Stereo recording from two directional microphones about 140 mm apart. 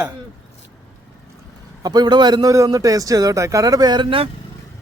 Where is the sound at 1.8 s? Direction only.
30° right (ahead or behind).